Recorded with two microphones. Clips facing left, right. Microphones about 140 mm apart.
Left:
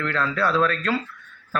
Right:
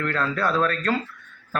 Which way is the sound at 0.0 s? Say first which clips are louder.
Left 1 dB; 45° right (ahead or behind).